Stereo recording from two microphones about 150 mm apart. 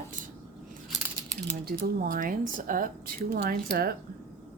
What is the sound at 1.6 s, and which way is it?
Speech, 85° right.